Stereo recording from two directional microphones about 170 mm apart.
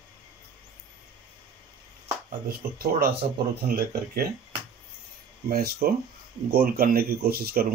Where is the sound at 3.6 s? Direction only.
60° right (ahead or behind).